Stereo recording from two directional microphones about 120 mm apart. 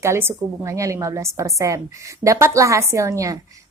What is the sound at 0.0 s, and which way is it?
A woman's voice, 20° right (ahead or behind).